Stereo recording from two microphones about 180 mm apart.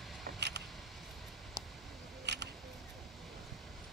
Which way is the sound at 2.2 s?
70° right (ahead or behind).